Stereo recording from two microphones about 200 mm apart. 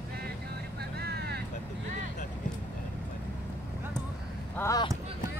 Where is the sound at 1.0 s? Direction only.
55° right (ahead or behind).